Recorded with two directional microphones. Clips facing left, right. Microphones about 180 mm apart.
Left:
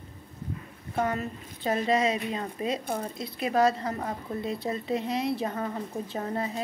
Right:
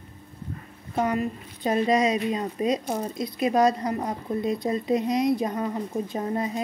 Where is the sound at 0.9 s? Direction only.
15° right (ahead or behind).